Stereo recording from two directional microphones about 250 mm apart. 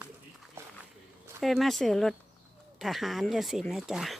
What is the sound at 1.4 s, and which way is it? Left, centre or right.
Speech, centre.